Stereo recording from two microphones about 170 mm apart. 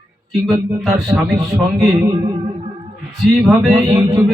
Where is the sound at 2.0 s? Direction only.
20° right (ahead or behind).